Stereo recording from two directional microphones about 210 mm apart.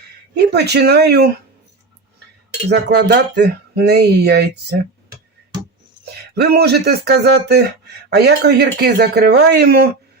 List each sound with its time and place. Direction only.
0.3 s speech: 50° right (ahead or behind)
2.6 s speech: 55° right (ahead or behind)
6.1 s speech: 50° right (ahead or behind)